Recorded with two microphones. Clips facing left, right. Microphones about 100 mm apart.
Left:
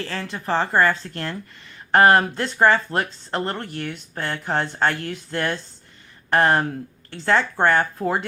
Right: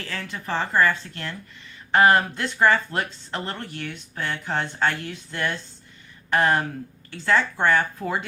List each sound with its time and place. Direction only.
0.0 s speech: 30° left (ahead or behind); by 5.5 s 45° left (ahead or behind)
6.3 s speech: 35° left (ahead or behind)